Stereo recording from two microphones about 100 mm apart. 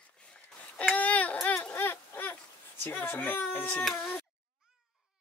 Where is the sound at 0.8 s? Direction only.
15° left (ahead or behind).